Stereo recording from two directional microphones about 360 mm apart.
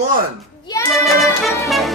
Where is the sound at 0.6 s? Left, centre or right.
Centre.